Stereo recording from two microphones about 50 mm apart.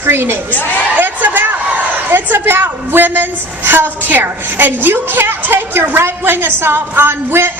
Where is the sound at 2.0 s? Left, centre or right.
Right.